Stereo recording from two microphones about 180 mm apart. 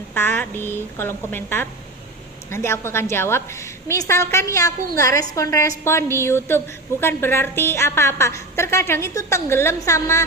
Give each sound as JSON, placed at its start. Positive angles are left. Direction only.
{"t": 0.1, "sound": "a woman's voice", "side_deg": 10}